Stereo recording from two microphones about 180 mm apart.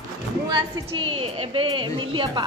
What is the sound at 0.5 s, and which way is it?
A woman's voice, 30° right (ahead or behind).